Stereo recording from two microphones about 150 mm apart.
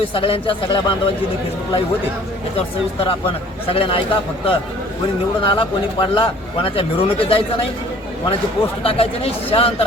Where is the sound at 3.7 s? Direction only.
40° left (ahead or behind).